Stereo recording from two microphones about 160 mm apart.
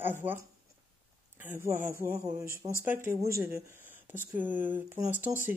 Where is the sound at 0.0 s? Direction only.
10° right (ahead or behind).